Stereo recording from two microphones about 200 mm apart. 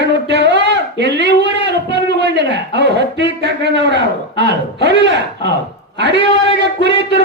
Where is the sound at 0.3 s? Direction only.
60° right (ahead or behind).